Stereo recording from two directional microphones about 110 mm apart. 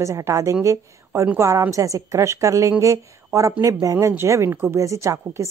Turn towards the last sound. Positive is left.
turn(degrees=-25)  # may be behind; listen again after turning